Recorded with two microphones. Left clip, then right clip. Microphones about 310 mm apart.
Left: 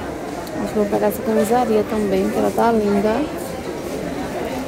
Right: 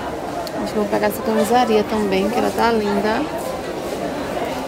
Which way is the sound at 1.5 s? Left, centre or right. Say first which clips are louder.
Right 2 dB; centre.